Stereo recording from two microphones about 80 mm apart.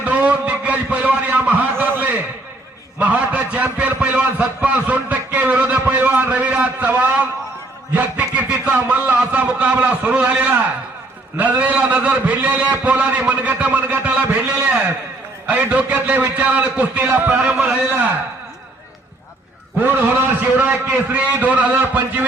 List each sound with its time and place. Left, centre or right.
0.0 s a sound: centre
3.0 s a man's voice: centre
19.8 s a man's voice: right